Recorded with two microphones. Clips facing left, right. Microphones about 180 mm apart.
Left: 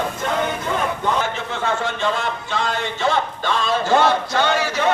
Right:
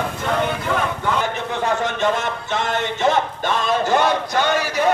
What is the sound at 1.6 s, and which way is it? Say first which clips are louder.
Speech: right 2 dB; 20° right (ahead or behind).